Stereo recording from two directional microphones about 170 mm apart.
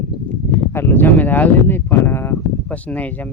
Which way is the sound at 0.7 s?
15° left (ahead or behind).